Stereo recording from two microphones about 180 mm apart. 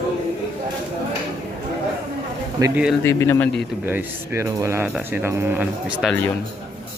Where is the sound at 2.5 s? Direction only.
20° right (ahead or behind).